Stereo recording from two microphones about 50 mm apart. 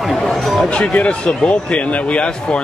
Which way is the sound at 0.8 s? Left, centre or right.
Left.